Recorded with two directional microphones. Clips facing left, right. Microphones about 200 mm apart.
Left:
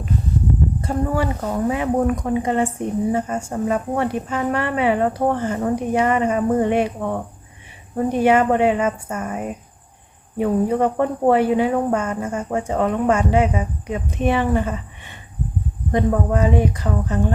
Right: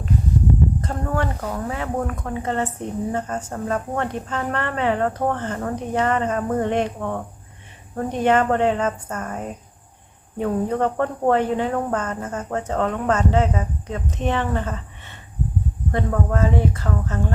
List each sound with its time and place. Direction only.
0.8 s speech: 10° left (ahead or behind)